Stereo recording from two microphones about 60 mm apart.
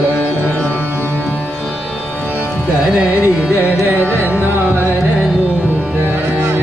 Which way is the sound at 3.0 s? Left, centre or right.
Right.